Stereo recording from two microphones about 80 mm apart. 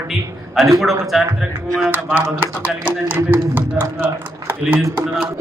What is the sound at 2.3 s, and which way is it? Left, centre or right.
Speech, right.